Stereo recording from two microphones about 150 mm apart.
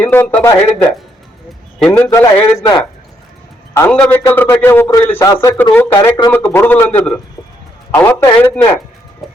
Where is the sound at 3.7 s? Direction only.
15° left (ahead or behind).